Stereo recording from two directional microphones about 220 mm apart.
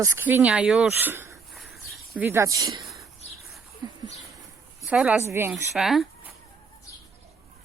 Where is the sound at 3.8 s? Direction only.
20° right (ahead or behind).